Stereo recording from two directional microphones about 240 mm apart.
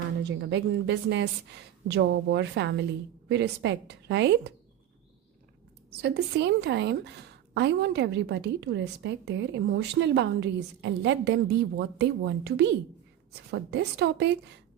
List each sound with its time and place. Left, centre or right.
0.2 s a woman's voice: right
6.0 s a woman's voice: right